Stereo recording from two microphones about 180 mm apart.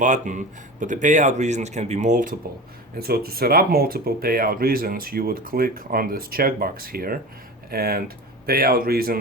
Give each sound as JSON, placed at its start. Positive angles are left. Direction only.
{"t": 0.0, "sound": "speech", "side_deg": -40}
{"t": 3.0, "sound": "speech", "side_deg": -55}